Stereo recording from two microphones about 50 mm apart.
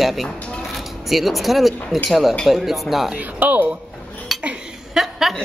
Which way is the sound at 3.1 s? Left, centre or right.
Right.